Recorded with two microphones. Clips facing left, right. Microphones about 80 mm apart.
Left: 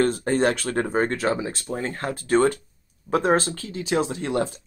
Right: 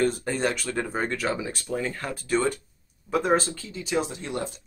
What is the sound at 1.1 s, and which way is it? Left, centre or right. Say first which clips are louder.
Speech: left 4 dB; left.